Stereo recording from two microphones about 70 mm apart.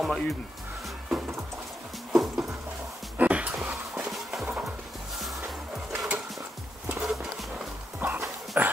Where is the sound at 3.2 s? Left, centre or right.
Right.